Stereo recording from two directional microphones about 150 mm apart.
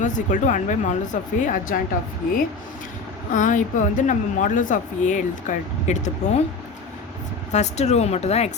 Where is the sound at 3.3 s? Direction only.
60° left (ahead or behind).